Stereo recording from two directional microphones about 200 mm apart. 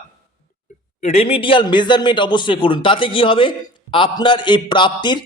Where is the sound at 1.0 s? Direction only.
30° left (ahead or behind).